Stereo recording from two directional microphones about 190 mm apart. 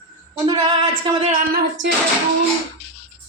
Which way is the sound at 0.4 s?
25° right (ahead or behind).